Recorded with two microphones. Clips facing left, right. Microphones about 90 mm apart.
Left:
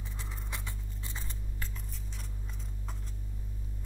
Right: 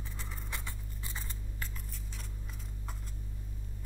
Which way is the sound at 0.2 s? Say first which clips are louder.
Even; centre (ahead or behind).